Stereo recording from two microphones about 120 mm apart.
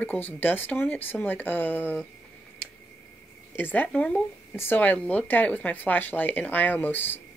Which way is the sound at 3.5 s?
15° left (ahead or behind).